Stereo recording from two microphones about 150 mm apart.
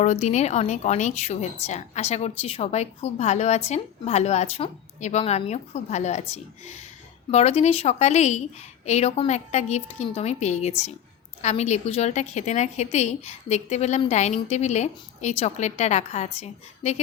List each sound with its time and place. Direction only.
0.0 s a woman's voice: 50° left (ahead or behind)